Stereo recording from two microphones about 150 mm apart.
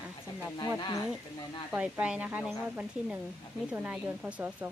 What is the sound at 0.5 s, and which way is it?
Speech, 30° left (ahead or behind).